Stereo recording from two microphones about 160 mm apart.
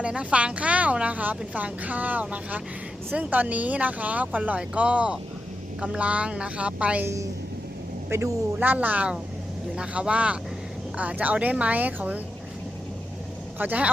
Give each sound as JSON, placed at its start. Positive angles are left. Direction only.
{"t": 0.0, "sound": "a woman's voice", "side_deg": -5}
{"t": 13.6, "sound": "a woman's voice", "side_deg": -10}